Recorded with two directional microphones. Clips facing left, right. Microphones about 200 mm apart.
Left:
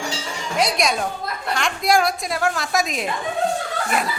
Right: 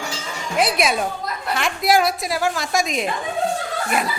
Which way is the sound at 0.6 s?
5° right (ahead or behind).